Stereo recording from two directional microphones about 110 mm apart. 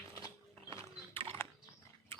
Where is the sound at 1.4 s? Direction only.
20° left (ahead or behind).